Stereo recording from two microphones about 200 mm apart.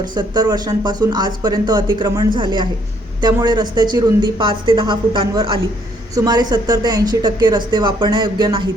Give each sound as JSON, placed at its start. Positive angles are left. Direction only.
{"t": 0.0, "sound": "speech", "side_deg": -20}